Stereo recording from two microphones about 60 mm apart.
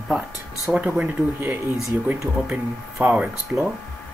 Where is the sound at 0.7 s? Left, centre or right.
Right.